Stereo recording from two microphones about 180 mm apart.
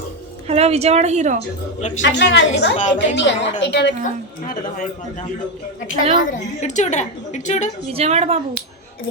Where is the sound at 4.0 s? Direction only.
50° left (ahead or behind).